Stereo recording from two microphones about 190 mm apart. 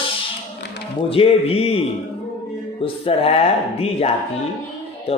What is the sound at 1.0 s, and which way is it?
Speech, 30° left (ahead or behind).